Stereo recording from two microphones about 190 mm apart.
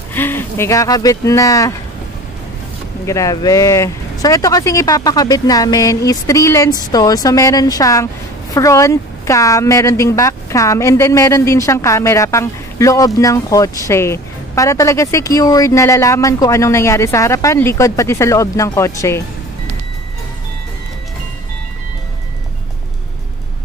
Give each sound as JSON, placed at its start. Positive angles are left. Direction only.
{"t": 0.1, "sound": "a woman's voice", "side_deg": 10}
{"t": 3.1, "sound": "a woman's voice", "side_deg": 15}